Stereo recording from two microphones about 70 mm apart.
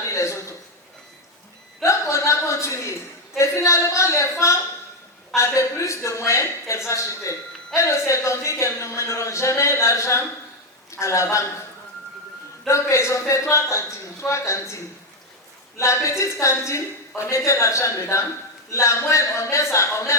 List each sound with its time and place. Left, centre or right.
0.1 s a sound: left
1.8 s chuckle: left
3.3 s a sound: left
10.9 s a man's voice: left
12.6 s a woman's voice: left
15.8 s a woman's voice: left